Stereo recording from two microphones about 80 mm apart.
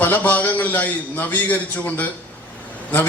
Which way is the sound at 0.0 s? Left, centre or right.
Left.